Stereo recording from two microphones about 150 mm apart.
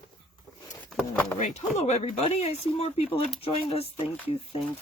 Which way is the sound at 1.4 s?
50° left (ahead or behind).